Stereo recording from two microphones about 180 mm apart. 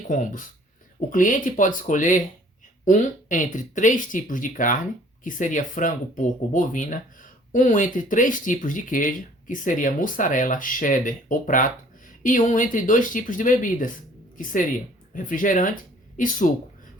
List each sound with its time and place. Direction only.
0.1 s speech: 45° left (ahead or behind)
15.1 s speech: 45° left (ahead or behind)